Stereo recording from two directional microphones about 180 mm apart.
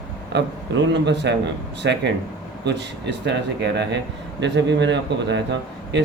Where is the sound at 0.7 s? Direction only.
80° right.